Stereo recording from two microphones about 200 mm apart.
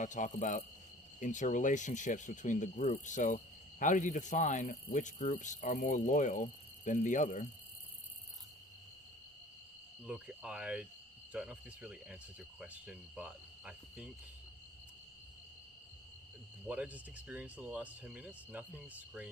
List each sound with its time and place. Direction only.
0.0 s speech: 40° left (ahead or behind)
10.1 s speech: 5° right (ahead or behind)
16.6 s speech: 5° right (ahead or behind)